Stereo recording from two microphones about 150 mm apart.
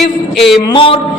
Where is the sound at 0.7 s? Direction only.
35° left (ahead or behind).